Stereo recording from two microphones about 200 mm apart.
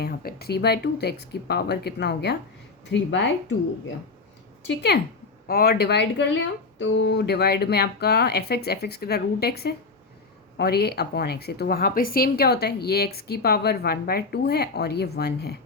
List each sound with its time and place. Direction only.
0.0 s speech: 50° left (ahead or behind)
4.6 s speech: 55° left (ahead or behind)